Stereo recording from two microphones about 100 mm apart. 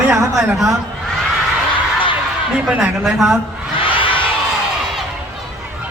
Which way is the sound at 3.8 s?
60° left (ahead or behind).